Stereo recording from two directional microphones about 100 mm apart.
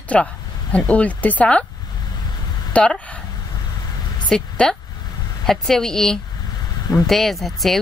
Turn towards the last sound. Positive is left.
turn(degrees=0)  # may be behind; listen again after turning